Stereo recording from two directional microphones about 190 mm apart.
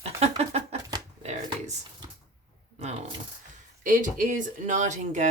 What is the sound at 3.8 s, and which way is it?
Speech, 45° right (ahead or behind).